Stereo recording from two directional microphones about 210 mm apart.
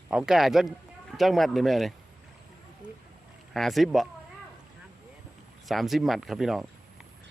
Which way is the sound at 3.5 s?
Centre (ahead or behind).